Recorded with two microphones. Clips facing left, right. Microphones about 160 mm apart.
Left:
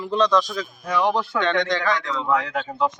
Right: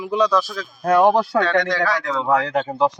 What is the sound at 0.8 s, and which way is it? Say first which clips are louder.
Speech: right 7 dB; 55° right (ahead or behind).